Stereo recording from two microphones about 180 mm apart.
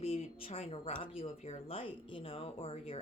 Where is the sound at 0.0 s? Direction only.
30° left (ahead or behind).